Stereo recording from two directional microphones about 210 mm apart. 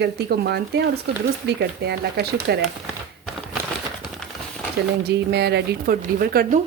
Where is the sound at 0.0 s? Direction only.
50° right (ahead or behind).